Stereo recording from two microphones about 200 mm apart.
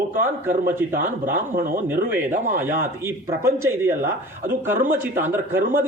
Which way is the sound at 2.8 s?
10° right (ahead or behind).